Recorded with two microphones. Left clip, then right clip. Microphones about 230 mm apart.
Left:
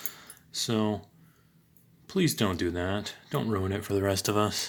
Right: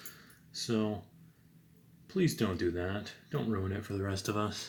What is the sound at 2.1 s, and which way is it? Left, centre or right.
Speech, left.